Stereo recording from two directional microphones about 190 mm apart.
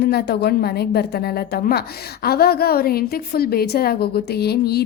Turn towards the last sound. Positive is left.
turn(degrees=55)  # may be behind; listen again after turning